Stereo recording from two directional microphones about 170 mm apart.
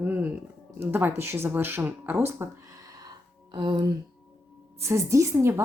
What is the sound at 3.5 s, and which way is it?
Speech, 25° right (ahead or behind).